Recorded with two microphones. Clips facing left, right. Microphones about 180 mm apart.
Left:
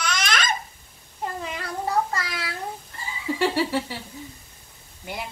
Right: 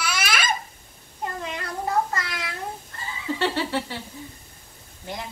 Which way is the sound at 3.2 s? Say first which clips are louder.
Left 2 dB; 10° left (ahead or behind).